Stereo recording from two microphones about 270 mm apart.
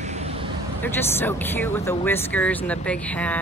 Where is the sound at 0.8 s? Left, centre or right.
Centre.